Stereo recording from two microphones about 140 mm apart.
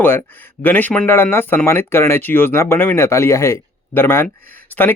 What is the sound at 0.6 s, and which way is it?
Speech, 15° left (ahead or behind).